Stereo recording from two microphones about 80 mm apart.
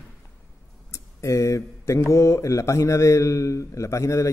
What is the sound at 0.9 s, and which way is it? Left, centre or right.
Mantra, left.